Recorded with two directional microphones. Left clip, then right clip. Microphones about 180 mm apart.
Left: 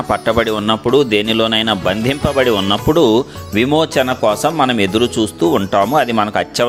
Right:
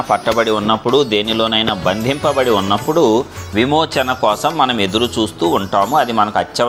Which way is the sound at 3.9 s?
30° left (ahead or behind).